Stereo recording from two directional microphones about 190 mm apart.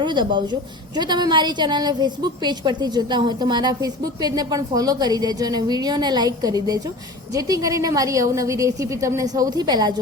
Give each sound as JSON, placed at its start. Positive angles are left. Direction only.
{"t": 0.0, "sound": "a woman's voice", "side_deg": -25}